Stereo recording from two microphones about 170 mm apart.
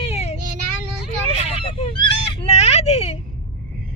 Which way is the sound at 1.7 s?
30° left (ahead or behind).